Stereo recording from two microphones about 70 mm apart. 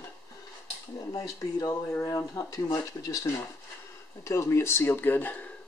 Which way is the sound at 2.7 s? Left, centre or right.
Left.